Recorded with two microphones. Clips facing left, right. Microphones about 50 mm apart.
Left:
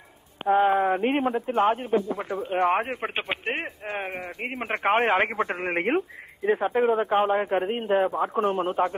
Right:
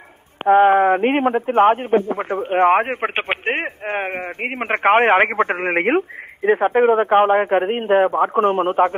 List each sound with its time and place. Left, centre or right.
0.5 s a man's voice: right